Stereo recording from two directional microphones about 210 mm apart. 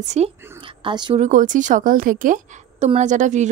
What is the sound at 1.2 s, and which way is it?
Speech, 40° right (ahead or behind).